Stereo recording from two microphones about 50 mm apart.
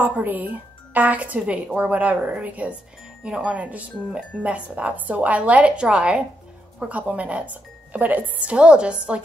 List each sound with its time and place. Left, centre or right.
0.0 s speech: right